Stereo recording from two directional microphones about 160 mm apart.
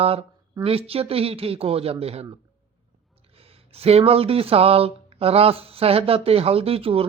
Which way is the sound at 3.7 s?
40° right (ahead or behind).